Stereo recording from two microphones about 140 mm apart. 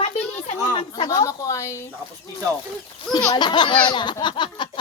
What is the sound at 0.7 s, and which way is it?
Speech, 40° left (ahead or behind).